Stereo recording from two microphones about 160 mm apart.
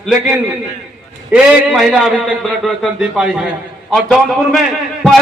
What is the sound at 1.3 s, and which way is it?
A man's voice, 5° right (ahead or behind).